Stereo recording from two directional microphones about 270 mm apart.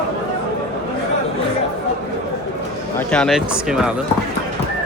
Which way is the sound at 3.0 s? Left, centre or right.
Centre.